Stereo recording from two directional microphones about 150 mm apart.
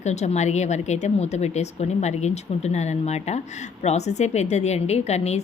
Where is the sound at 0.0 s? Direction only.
50° left (ahead or behind).